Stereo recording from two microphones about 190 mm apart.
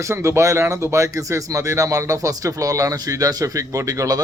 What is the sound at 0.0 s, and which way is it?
Speech, 15° right (ahead or behind).